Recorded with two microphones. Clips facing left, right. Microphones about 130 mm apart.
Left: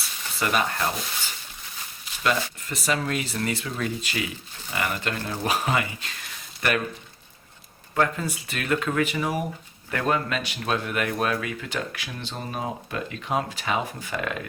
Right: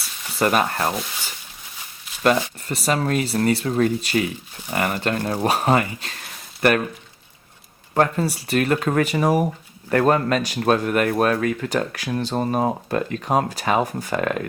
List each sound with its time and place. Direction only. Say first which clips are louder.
0.3 s speech: right 5 dB; 45° right (ahead or behind)
2.2 s speech: right 6 dB; 35° right (ahead or behind)
7.9 s speech: right 5 dB; 40° right (ahead or behind)